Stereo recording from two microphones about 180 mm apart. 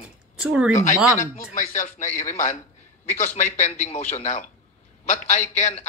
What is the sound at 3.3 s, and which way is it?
A man's voice, 40° left (ahead or behind).